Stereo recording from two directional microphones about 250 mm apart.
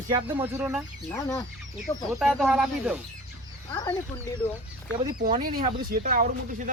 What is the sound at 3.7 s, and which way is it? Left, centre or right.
Speech, centre.